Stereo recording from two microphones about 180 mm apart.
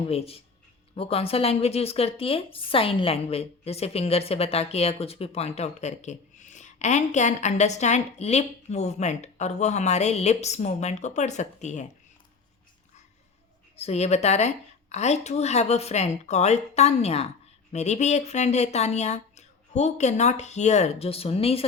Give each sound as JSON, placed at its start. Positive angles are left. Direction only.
{"t": 0.0, "sound": "speech", "side_deg": 35}
{"t": 13.7, "sound": "speech", "side_deg": 35}